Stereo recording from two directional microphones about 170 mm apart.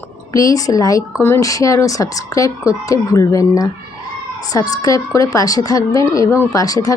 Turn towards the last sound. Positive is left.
turn(degrees=20)  # may be behind; listen again after turning